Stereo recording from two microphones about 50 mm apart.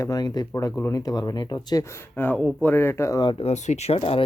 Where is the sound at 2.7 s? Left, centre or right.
Left.